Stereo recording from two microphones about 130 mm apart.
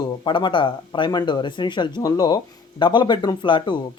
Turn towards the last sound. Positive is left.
turn(degrees=35)  # may be behind; listen again after turning